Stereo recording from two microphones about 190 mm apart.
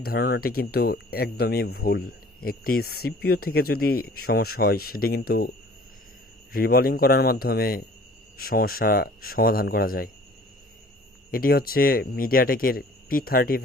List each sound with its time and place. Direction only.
0.0 s speech: 55° left (ahead or behind)
6.5 s speech: 50° left (ahead or behind)
11.3 s speech: 50° left (ahead or behind)